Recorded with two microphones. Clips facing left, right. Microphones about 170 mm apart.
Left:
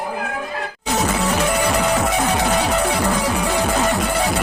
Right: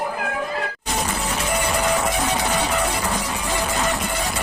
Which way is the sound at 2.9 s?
65° left (ahead or behind).